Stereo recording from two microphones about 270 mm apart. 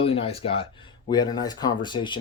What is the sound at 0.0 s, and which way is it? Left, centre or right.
Speech, left.